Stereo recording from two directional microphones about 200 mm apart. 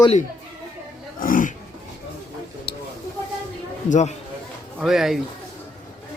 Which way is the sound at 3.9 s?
35° left (ahead or behind).